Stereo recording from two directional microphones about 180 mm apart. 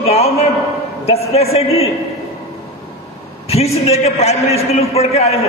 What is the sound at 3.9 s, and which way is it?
A man's voice, 35° left (ahead or behind).